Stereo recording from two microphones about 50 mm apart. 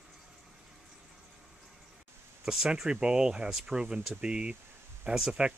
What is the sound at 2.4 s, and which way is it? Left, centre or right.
Speech, centre.